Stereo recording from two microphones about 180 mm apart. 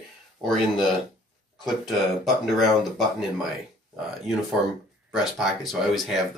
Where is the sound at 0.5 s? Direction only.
Centre (ahead or behind).